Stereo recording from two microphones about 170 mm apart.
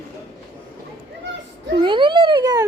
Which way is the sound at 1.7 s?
30° right (ahead or behind).